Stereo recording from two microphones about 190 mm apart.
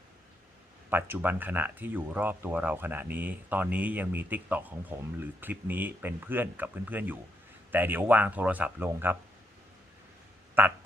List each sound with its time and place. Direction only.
0.9 s speech: 10° right (ahead or behind)
10.6 s speech: 10° right (ahead or behind)